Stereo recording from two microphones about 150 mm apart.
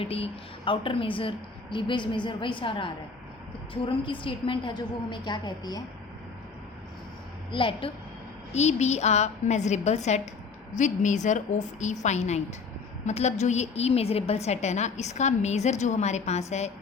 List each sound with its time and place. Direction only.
0.0 s a woman's voice: 40° left (ahead or behind)
7.5 s a woman's voice: 35° left (ahead or behind)
8.5 s a woman's voice: 50° left (ahead or behind)